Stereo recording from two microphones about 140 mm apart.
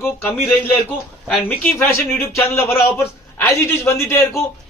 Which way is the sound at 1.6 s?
15° left (ahead or behind).